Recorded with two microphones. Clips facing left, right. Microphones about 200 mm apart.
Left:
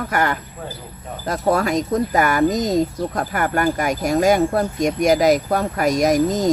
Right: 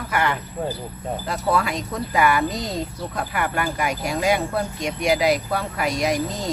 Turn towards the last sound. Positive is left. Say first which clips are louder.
# left 7 dB
turn(degrees=45)  # may be behind; listen again after turning